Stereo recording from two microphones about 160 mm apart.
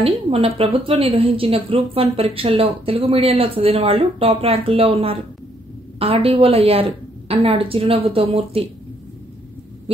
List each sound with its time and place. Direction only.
0.0 s a woman's voice: 35° right (ahead or behind)